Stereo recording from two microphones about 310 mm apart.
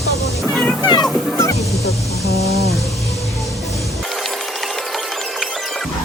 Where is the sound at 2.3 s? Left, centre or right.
Centre.